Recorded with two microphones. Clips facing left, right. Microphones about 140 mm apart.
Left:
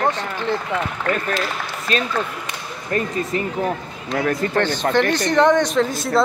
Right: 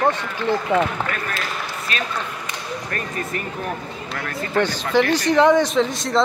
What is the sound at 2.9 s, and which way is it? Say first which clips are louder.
Speech: left 9 dB; 25° left (ahead or behind).